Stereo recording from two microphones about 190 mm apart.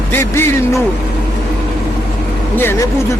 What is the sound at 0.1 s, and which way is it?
Speech, 10° left (ahead or behind).